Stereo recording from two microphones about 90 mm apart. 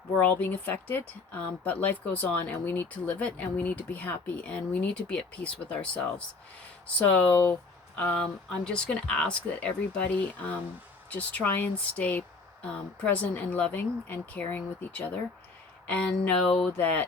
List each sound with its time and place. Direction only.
0.2 s speech: 20° left (ahead or behind)